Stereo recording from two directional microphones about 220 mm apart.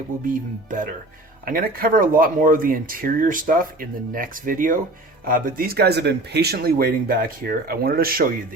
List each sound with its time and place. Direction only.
0.3 s speech: 35° right (ahead or behind)